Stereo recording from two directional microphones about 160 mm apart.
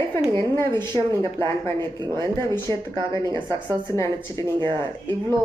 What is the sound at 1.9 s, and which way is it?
Speech, 25° right (ahead or behind).